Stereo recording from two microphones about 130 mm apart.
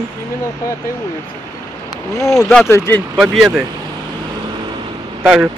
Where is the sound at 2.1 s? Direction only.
25° left (ahead or behind).